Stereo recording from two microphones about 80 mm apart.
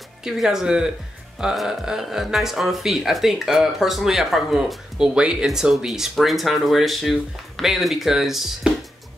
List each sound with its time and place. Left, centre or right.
0.2 s speech: centre